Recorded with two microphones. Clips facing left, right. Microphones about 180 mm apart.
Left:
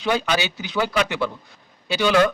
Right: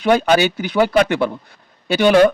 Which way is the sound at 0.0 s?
55° right (ahead or behind).